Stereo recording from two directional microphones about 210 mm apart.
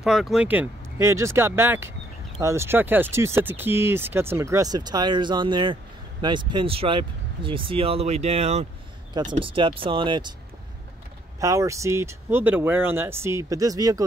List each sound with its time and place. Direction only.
0.0 s speech: centre (ahead or behind); by 10.3 s 20° right (ahead or behind)
11.3 s speech: 15° right (ahead or behind)